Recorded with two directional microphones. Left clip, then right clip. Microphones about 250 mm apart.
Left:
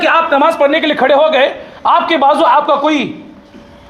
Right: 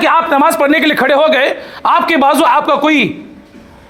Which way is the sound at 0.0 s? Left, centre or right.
Right.